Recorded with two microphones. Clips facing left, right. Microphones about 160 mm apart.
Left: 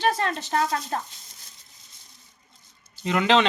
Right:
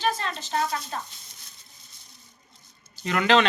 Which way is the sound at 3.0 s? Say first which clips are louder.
Left 1 dB; 20° left (ahead or behind).